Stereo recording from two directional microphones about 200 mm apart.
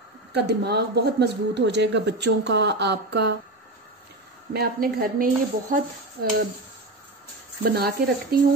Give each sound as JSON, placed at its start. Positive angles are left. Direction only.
{"t": 0.3, "sound": "speech", "side_deg": -55}
{"t": 4.6, "sound": "speech", "side_deg": -50}
{"t": 7.7, "sound": "speech", "side_deg": -50}